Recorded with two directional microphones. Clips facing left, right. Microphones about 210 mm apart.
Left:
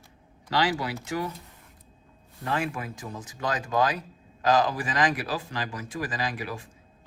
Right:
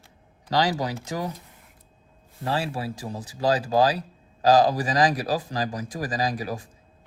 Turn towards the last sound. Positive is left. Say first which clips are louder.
# right 5 dB
turn(degrees=-40)  # may be behind; listen again after turning